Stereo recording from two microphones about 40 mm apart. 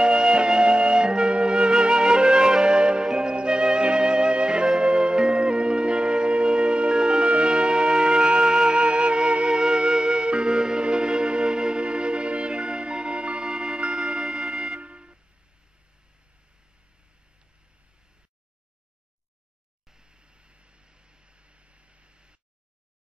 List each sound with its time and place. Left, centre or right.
0.0 s flute: right
2.6 s music: right
13.4 s music: centre
13.7 s music: right
19.9 s a sound: right